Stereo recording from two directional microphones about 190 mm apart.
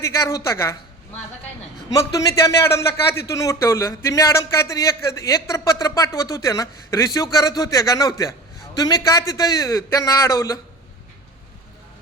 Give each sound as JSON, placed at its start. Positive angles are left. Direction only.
{"t": 0.0, "sound": "a man's voice", "side_deg": 15}
{"t": 2.1, "sound": "a man's voice", "side_deg": 15}